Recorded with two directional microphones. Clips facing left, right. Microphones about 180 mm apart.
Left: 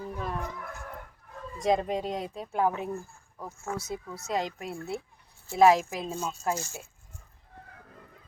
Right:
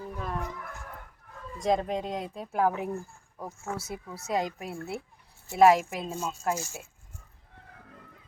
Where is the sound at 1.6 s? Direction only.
Centre (ahead or behind).